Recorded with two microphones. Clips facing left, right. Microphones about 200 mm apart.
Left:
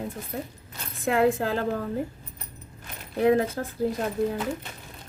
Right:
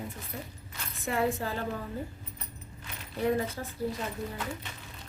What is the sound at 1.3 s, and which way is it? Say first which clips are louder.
Speech: left 7 dB; 90° left.